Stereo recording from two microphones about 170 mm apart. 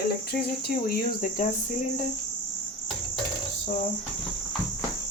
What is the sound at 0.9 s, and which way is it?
Speech, 50° left (ahead or behind).